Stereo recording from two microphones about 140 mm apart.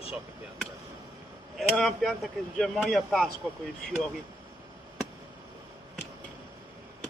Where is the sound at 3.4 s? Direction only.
10° right (ahead or behind).